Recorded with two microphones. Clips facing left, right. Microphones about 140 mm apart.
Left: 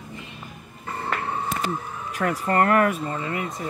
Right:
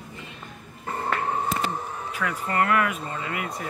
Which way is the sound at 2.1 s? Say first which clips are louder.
Left 5 dB; 45° left (ahead or behind).